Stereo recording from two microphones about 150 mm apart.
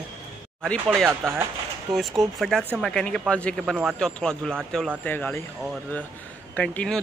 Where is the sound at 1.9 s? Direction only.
Centre (ahead or behind).